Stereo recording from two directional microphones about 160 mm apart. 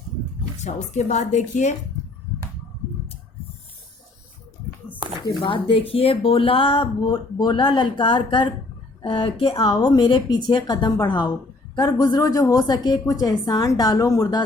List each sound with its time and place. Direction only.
0.6 s a woman's voice: 45° left (ahead or behind)
5.4 s speech: 30° left (ahead or behind)